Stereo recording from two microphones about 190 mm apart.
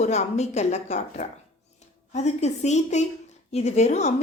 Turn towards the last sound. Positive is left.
turn(degrees=35)  # may be behind; listen again after turning